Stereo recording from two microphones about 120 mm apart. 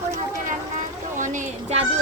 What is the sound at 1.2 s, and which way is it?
Speech, 90° right.